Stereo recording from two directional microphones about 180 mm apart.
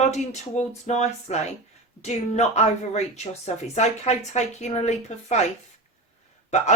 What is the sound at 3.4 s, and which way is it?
Speech, 40° left (ahead or behind).